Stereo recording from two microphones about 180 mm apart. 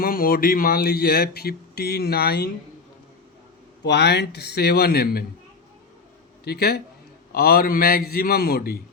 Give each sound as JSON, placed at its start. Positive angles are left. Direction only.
{"t": 0.0, "sound": "speech", "side_deg": 55}
{"t": 3.8, "sound": "speech", "side_deg": 70}
{"t": 6.4, "sound": "a man's voice", "side_deg": 60}